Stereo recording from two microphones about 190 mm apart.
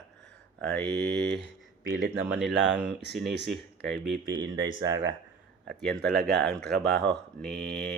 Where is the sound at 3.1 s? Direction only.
Centre (ahead or behind).